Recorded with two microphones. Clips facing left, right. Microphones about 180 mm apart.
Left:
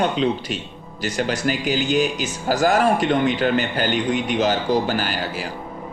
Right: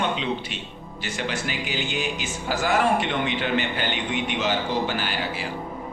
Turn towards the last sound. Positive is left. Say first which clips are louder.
# left 3 dB
turn(degrees=40)  # may be behind; listen again after turning